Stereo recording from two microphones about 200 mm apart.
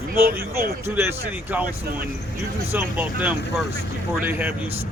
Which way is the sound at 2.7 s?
10° right (ahead or behind).